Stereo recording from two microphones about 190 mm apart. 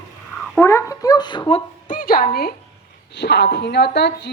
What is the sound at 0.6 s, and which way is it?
Speech, 15° left (ahead or behind).